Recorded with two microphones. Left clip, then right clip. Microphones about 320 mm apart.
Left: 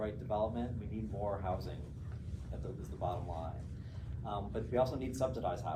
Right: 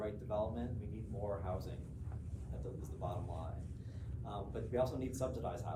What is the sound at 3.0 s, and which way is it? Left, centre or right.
Speech, centre.